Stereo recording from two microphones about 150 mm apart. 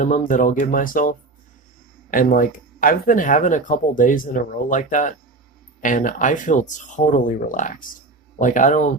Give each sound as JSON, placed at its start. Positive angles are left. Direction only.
{"t": 0.0, "sound": "speech", "side_deg": 60}